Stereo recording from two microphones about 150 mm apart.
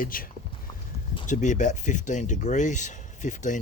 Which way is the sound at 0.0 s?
70° left (ahead or behind).